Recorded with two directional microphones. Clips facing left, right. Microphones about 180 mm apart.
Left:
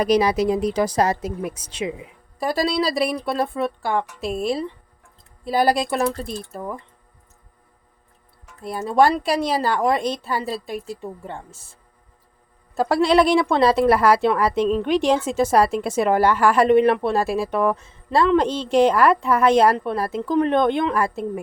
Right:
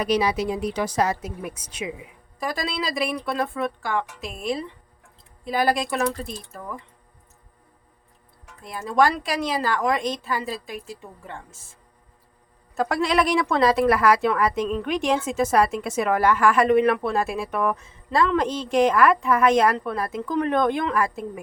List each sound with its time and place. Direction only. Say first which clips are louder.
0.0 s speech: left 4 dB; 40° left (ahead or behind)
8.6 s speech: left 3 dB; 30° left (ahead or behind)
12.7 s speech: left 5 dB; 30° left (ahead or behind)